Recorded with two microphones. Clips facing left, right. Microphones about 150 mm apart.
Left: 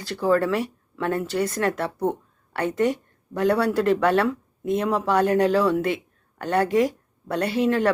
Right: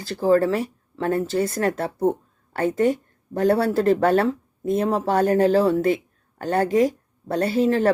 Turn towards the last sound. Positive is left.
turn(degrees=-35)  # may be behind; listen again after turning